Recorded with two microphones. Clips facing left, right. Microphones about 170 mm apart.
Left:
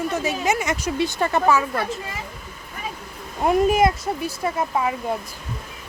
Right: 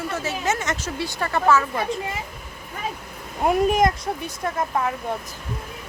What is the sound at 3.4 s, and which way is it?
Speech, centre (ahead or behind).